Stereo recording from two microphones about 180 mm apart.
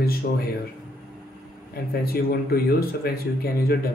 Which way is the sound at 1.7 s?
60° left (ahead or behind).